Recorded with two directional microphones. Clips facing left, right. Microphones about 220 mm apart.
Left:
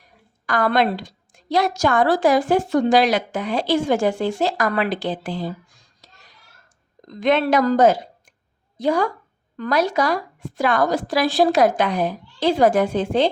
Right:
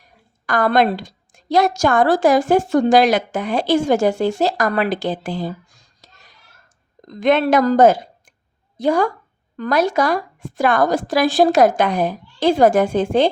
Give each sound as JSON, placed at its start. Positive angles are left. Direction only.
{"t": 0.4, "sound": "a woman's voice", "side_deg": -45}
{"t": 6.0, "sound": "a sound", "side_deg": -45}
{"t": 7.2, "sound": "a woman's voice", "side_deg": -50}